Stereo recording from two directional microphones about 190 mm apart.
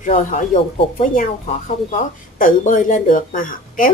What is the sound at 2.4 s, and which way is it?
A woman's voice, 45° left (ahead or behind).